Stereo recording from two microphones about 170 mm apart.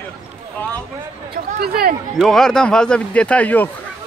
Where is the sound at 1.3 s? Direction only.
65° right (ahead or behind).